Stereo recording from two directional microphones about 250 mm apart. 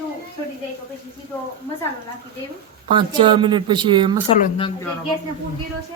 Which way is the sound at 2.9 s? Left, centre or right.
Centre.